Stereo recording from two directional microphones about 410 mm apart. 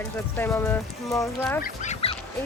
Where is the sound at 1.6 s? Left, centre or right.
Centre.